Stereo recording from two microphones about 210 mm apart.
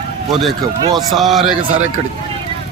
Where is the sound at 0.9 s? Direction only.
Centre (ahead or behind).